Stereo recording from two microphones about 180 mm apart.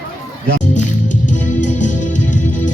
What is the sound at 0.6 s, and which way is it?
Music, 45° left (ahead or behind).